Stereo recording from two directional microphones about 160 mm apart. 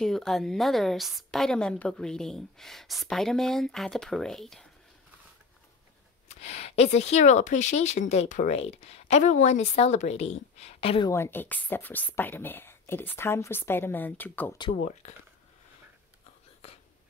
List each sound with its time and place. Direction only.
0.0 s a woman's voice: 5° left (ahead or behind)
6.2 s speech: 40° left (ahead or behind)
11.1 s speech: 15° left (ahead or behind)
14.8 s speech: 45° left (ahead or behind)